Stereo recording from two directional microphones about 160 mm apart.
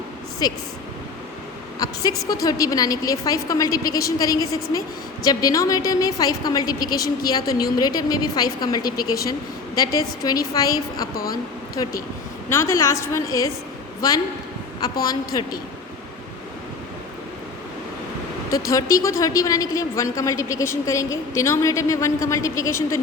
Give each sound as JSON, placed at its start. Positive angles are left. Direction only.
{"t": 0.4, "sound": "a woman's voice", "side_deg": 25}
{"t": 1.8, "sound": "a woman's voice", "side_deg": 25}
{"t": 11.1, "sound": "speech", "side_deg": 65}
{"t": 12.5, "sound": "a woman's voice", "side_deg": 15}
{"t": 14.8, "sound": "a woman's voice", "side_deg": 25}
{"t": 18.5, "sound": "a woman's voice", "side_deg": 20}